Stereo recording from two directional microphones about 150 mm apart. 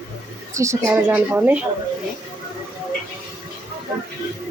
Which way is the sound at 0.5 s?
20° right (ahead or behind).